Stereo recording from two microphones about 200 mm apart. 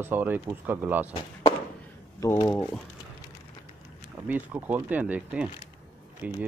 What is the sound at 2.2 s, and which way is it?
Speech, 15° left (ahead or behind).